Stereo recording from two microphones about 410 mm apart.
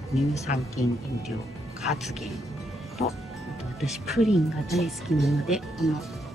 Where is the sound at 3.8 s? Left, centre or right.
Centre.